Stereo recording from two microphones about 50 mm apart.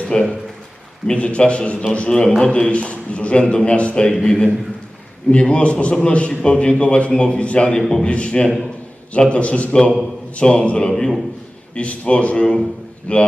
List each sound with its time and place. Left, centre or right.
0.1 s a man's voice: centre
7.8 s a man's voice: centre
8.0 s a man's voice: left